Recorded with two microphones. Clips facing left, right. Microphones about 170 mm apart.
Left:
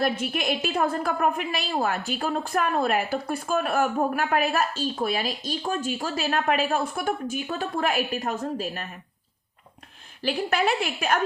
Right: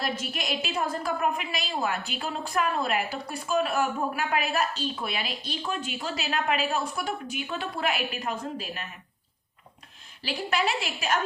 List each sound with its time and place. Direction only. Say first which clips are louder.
0.0 s a woman's voice: left 6 dB; 55° left (ahead or behind)
10.2 s a woman's voice: left 4 dB; 50° left (ahead or behind)